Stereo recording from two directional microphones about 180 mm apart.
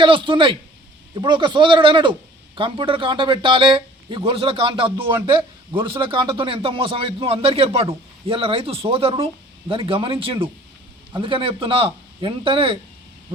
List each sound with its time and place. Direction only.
0.0 s speech: 25° right (ahead or behind)